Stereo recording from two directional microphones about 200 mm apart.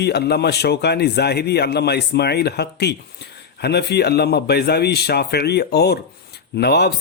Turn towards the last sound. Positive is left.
turn(degrees=55)  # may be behind; listen again after turning